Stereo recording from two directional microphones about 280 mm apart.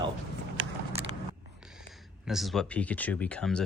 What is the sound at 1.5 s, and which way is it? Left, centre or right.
Speech, centre.